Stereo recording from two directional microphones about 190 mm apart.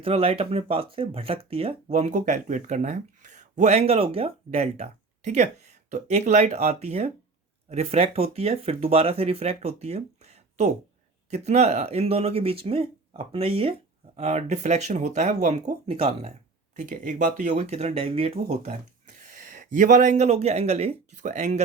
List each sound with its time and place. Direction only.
0.0 s speech: 30° right (ahead or behind)